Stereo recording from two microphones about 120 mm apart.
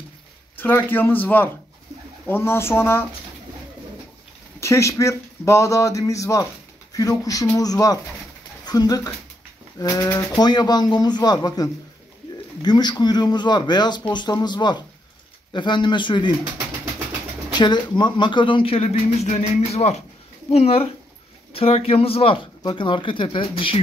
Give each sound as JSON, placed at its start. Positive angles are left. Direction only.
{"t": 0.6, "sound": "a man's voice", "side_deg": 15}
{"t": 4.6, "sound": "speech", "side_deg": 25}
{"t": 17.6, "sound": "speech", "side_deg": 40}